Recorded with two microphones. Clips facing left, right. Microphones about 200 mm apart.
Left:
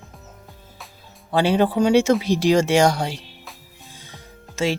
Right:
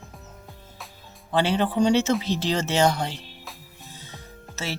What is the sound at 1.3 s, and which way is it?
Speech, 10° left (ahead or behind).